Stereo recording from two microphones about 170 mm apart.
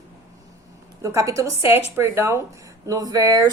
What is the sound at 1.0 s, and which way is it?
A woman's voice, 20° right (ahead or behind).